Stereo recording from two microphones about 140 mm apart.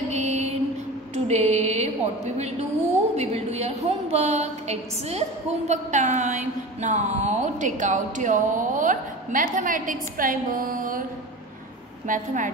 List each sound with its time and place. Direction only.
0.1 s music: 55° right (ahead or behind)
1.1 s a woman's voice: 50° right (ahead or behind); by 11.1 s 75° right (ahead or behind)
12.1 s a woman's voice: 70° right (ahead or behind)